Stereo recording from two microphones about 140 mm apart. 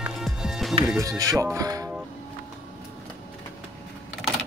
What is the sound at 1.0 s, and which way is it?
Speech, 25° right (ahead or behind).